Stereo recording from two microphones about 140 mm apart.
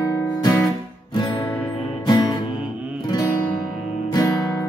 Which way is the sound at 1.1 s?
30° left (ahead or behind).